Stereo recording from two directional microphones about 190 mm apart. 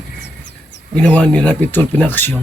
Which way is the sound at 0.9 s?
5° left (ahead or behind).